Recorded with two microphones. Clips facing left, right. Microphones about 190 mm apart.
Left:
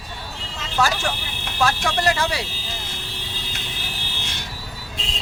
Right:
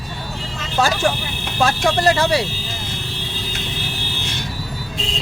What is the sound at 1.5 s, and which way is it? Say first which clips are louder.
Speech: right 4 dB; 25° right (ahead or behind).